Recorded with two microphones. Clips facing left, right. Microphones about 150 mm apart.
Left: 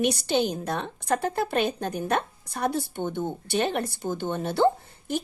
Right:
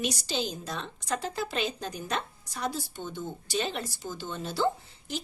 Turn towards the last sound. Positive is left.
turn(degrees=55)  # may be behind; listen again after turning